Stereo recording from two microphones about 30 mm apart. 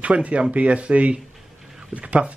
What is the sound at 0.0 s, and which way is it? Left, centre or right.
Speech, right.